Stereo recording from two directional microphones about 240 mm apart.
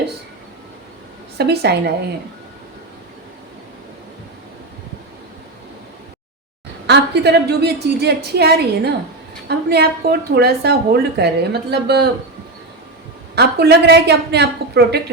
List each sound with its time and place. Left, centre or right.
1.4 s a woman's voice: right
6.8 s a woman's voice: right
13.3 s a woman's voice: right